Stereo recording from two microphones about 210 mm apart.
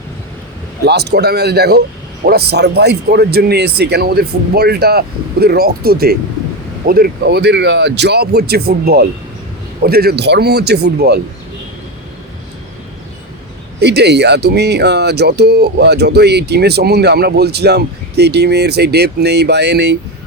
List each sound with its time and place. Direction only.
0.9 s speech: 50° right (ahead or behind)
13.7 s speech: 55° right (ahead or behind)